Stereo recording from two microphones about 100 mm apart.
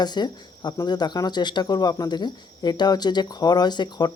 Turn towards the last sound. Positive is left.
turn(degrees=45)  # may be behind; listen again after turning